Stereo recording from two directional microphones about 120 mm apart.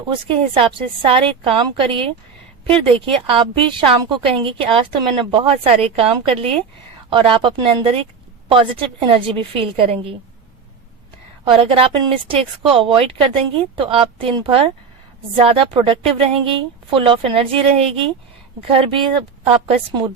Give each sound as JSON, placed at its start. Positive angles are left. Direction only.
{"t": 0.1, "sound": "speech", "side_deg": -45}
{"t": 5.6, "sound": "speech", "side_deg": -55}
{"t": 11.5, "sound": "speech", "side_deg": -50}